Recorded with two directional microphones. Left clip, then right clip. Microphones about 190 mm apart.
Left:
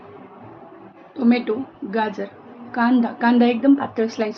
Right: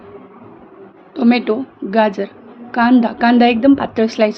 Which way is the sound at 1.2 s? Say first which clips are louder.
Right 5 dB; 55° right (ahead or behind).